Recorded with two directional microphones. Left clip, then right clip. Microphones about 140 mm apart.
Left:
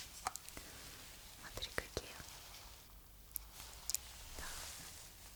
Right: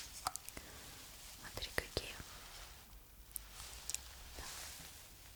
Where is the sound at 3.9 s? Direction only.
35° right (ahead or behind).